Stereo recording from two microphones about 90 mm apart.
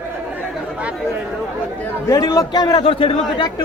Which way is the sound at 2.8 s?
90° left.